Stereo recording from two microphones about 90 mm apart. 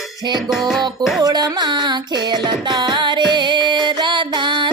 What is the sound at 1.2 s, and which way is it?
Music, 45° right (ahead or behind).